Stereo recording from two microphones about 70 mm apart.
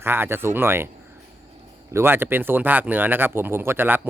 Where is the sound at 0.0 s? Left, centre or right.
Right.